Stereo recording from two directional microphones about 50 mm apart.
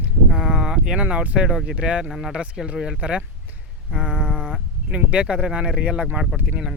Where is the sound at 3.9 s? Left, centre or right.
Right.